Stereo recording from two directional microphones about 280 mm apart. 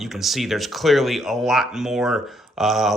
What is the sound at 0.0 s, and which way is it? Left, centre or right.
Speech, centre.